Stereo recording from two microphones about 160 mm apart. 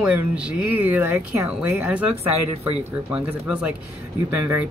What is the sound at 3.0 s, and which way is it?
Speech, 5° right (ahead or behind).